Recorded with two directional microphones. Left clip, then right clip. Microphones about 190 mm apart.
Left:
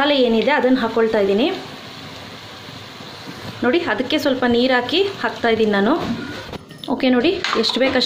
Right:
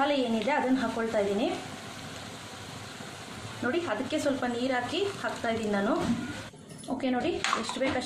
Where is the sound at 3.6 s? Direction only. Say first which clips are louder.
Left 12 dB; 40° left (ahead or behind).